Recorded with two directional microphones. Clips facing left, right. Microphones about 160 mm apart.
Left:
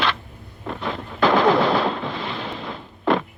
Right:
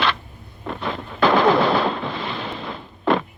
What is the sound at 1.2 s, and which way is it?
Machine gun, 65° right (ahead or behind).